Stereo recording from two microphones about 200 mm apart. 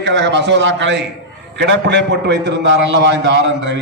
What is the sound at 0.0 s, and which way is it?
A man's voice, 60° right (ahead or behind).